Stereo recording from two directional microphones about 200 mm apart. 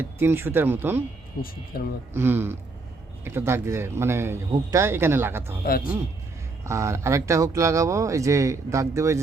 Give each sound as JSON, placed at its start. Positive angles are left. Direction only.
{"t": 0.0, "sound": "speech", "side_deg": -10}
{"t": 1.4, "sound": "speech", "side_deg": 50}
{"t": 2.1, "sound": "speech", "side_deg": -10}
{"t": 5.6, "sound": "speech", "side_deg": 45}
{"t": 6.7, "sound": "speech", "side_deg": -15}